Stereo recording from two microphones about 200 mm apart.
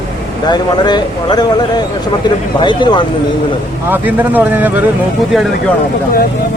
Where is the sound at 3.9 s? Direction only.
10° right (ahead or behind).